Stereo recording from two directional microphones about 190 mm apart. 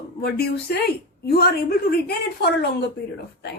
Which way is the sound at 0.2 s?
55° left (ahead or behind).